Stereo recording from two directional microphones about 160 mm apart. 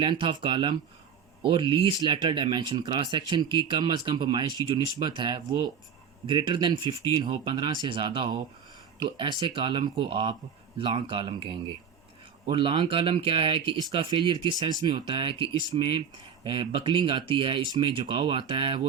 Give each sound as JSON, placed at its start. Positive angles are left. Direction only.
{"t": 0.0, "sound": "speech", "side_deg": -30}
{"t": 9.4, "sound": "speech", "side_deg": -30}